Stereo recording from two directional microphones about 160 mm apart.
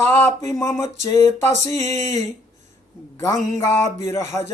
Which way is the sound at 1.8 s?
45° right (ahead or behind).